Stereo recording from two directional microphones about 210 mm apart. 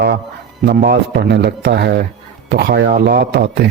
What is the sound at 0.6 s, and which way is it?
Speech, 50° right (ahead or behind).